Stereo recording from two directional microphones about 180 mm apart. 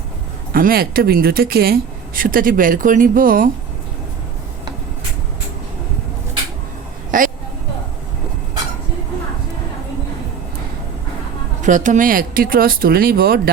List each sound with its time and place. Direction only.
0.5 s speech: 55° right (ahead or behind)
7.1 s a sound: 50° right (ahead or behind)
11.6 s speech: 45° right (ahead or behind)